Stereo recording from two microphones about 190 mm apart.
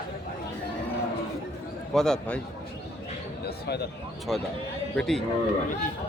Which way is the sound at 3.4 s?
60° left (ahead or behind).